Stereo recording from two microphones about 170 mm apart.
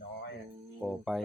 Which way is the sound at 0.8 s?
Centre (ahead or behind).